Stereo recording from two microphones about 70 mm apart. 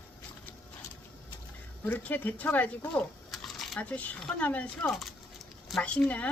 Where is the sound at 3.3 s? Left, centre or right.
Centre.